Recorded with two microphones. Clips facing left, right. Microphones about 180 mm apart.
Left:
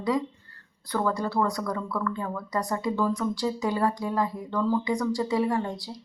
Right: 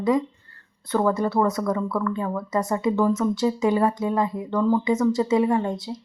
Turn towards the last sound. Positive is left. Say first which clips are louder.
# right 5 dB
turn(degrees=-20)  # may be behind; listen again after turning